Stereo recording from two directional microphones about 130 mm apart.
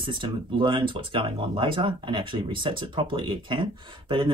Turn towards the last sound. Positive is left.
turn(degrees=-40)  # may be behind; listen again after turning